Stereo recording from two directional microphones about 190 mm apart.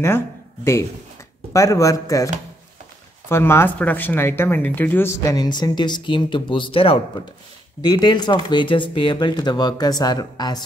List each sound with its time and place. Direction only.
1.5 s speech: 15° left (ahead or behind)